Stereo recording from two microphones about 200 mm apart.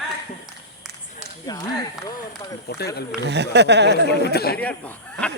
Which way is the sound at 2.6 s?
55° left (ahead or behind).